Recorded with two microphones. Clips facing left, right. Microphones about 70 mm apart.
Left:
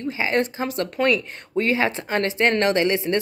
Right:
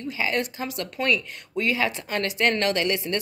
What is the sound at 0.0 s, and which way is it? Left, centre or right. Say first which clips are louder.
A woman's voice: left 4 dB; left.